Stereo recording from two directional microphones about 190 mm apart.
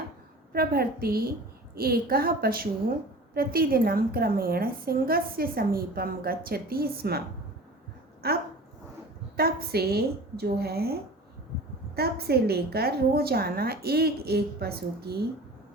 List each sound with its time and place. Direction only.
0.5 s a woman's voice: 50° right (ahead or behind)
8.2 s a woman's voice: 55° right (ahead or behind)
11.9 s a woman's voice: 55° right (ahead or behind)